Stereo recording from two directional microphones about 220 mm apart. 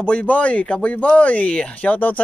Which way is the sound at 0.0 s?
5° left (ahead or behind).